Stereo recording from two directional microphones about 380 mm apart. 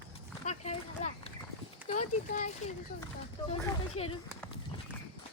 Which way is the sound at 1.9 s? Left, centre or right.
Centre.